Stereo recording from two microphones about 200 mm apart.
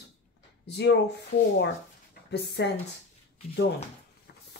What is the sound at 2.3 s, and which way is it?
Speech, 60° left (ahead or behind).